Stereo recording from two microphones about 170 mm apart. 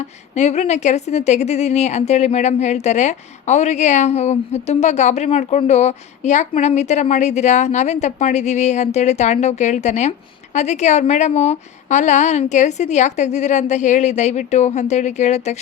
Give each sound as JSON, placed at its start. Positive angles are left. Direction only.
{"t": 0.3, "sound": "a woman's voice", "side_deg": 40}